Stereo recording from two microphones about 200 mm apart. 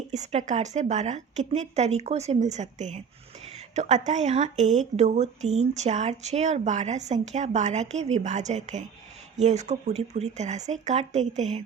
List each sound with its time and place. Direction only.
0.1 s a woman's voice: 35° right (ahead or behind)